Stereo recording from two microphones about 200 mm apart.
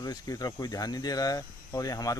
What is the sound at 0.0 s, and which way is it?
Speech, 20° left (ahead or behind).